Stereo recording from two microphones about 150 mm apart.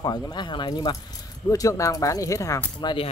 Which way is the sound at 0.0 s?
25° left (ahead or behind).